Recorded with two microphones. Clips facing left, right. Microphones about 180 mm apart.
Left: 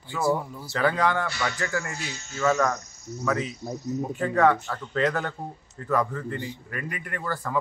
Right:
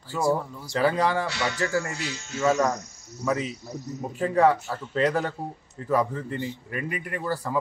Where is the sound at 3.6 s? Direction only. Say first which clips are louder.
Left 4 dB; 25° left (ahead or behind).